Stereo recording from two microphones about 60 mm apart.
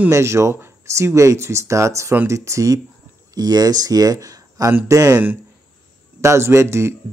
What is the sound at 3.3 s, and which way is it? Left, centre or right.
Speech, right.